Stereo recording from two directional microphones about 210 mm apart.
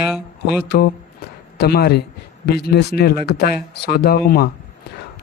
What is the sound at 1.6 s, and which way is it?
Speech, 50° left (ahead or behind).